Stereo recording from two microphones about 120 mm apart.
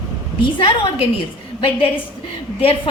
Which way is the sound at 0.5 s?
45° left (ahead or behind).